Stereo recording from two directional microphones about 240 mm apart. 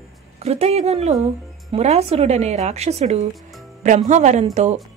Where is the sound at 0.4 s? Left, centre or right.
Right.